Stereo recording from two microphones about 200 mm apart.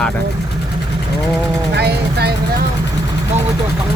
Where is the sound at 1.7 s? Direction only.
55° right (ahead or behind).